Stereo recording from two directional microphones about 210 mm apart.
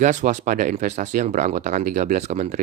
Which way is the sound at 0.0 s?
35° right (ahead or behind).